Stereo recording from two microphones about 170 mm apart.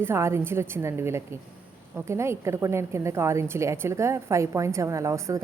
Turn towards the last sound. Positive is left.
turn(degrees=-15)  # may be behind; listen again after turning